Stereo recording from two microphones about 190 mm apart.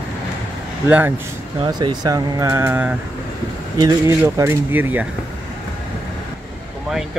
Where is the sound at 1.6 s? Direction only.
25° right (ahead or behind).